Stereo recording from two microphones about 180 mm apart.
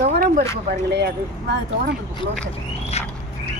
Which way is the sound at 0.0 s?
50° right (ahead or behind).